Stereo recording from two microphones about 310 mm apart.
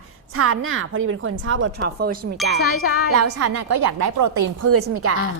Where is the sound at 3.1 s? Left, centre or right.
Right.